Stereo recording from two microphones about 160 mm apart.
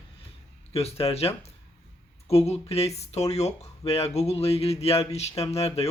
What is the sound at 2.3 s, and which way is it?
Speech, 40° left (ahead or behind).